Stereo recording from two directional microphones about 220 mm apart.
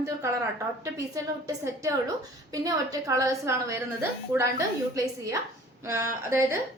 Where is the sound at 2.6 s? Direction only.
15° right (ahead or behind).